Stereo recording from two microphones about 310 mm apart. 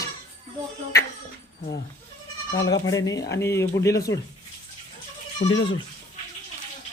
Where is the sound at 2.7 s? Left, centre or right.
Centre.